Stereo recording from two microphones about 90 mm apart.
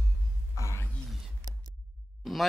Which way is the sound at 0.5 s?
35° left (ahead or behind).